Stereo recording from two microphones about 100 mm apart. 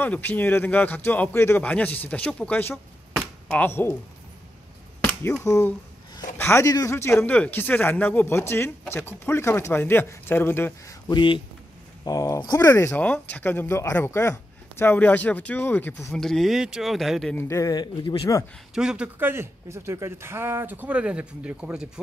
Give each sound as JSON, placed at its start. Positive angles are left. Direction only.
{"t": 0.0, "sound": "speech", "side_deg": 20}
{"t": 1.6, "sound": "speech", "side_deg": 15}
{"t": 3.2, "sound": "a sound", "side_deg": 5}
{"t": 3.6, "sound": "speech", "side_deg": 20}
{"t": 5.0, "sound": "speech", "side_deg": 25}
{"t": 11.1, "sound": "speech", "side_deg": 55}
{"t": 12.0, "sound": "speech", "side_deg": 35}
{"t": 13.0, "sound": "speech", "side_deg": 15}
{"t": 16.1, "sound": "speech", "side_deg": 5}
{"t": 17.4, "sound": "a man's voice", "side_deg": 30}
{"t": 18.8, "sound": "speech", "side_deg": -10}
{"t": 19.1, "sound": "speech", "side_deg": -20}